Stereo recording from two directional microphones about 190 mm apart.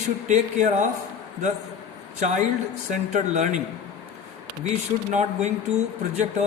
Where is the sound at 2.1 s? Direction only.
40° right (ahead or behind).